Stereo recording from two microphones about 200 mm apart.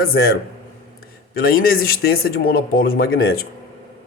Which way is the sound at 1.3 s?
45° left (ahead or behind).